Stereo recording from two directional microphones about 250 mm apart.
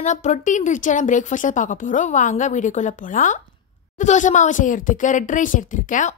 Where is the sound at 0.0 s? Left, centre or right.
Left.